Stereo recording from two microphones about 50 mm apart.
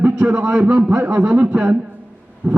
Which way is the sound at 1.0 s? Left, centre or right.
Right.